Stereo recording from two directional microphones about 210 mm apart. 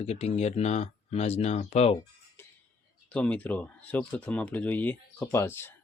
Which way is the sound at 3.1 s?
5° left (ahead or behind).